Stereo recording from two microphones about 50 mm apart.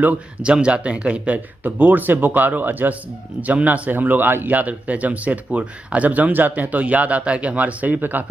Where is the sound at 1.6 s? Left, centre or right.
Right.